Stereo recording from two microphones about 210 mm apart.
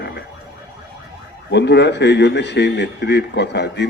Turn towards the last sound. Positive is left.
turn(degrees=55)  # may be behind; listen again after turning